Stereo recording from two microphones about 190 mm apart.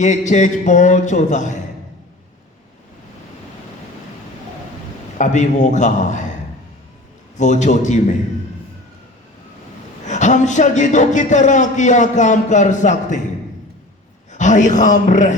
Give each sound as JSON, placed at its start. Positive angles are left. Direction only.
{"t": 0.0, "sound": "a man's voice", "side_deg": 40}
{"t": 5.1, "sound": "a man's voice", "side_deg": 40}
{"t": 7.3, "sound": "a man's voice", "side_deg": 40}
{"t": 10.0, "sound": "a man's voice", "side_deg": 40}
{"t": 14.3, "sound": "a man's voice", "side_deg": 40}